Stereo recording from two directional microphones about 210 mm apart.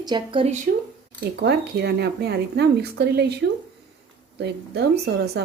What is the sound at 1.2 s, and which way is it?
A woman's voice, 50° right (ahead or behind).